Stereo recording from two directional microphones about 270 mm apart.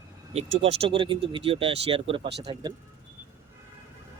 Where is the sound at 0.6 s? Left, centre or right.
Right.